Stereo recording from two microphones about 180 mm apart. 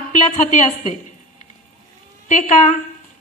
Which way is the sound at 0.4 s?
40° left (ahead or behind).